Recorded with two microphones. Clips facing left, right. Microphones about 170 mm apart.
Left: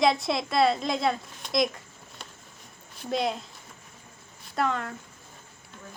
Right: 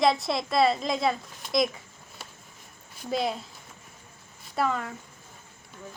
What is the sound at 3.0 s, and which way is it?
Speech, centre (ahead or behind).